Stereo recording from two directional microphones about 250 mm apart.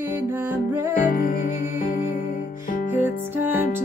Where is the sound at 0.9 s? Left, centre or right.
Left.